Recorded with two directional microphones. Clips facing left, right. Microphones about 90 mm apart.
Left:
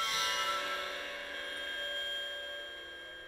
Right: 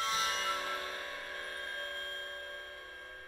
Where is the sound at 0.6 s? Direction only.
30° right (ahead or behind).